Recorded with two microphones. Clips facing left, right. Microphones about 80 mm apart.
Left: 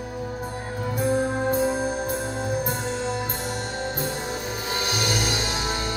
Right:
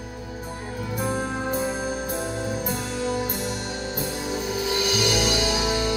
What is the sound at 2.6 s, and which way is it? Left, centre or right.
Music, left.